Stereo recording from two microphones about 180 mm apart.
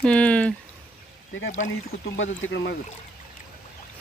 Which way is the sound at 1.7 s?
90° left.